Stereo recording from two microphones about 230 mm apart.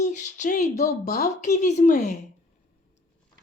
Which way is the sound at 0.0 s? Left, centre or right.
Left.